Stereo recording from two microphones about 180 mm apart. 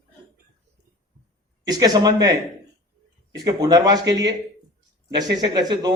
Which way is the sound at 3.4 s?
20° right (ahead or behind).